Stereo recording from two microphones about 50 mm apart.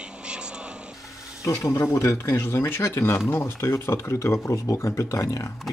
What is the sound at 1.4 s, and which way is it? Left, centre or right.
Speech, left.